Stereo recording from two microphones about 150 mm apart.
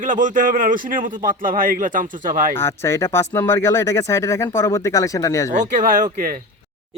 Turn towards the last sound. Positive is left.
turn(degrees=-60)  # may be behind; listen again after turning